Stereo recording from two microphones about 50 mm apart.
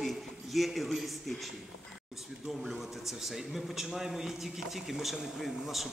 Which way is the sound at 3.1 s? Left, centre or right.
Centre.